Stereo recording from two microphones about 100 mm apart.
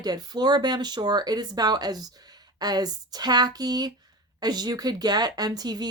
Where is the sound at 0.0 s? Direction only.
45° right (ahead or behind).